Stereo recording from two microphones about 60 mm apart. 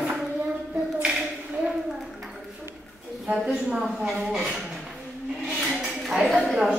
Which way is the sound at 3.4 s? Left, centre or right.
Centre.